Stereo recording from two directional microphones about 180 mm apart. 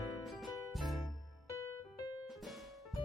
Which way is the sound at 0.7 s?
Centre (ahead or behind).